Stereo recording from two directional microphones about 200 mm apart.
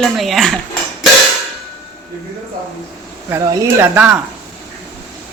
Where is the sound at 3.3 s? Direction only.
10° right (ahead or behind).